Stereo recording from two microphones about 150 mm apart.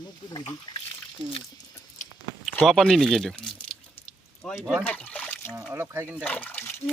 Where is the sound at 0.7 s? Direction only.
30° left (ahead or behind).